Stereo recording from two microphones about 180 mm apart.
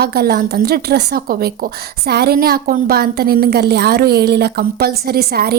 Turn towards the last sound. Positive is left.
turn(degrees=-60)  # may be behind; listen again after turning